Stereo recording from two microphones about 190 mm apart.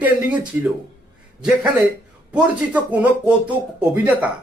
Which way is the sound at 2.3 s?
10° right (ahead or behind).